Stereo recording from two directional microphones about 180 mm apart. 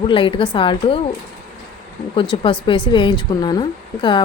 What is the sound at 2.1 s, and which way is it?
Speech, 30° left (ahead or behind).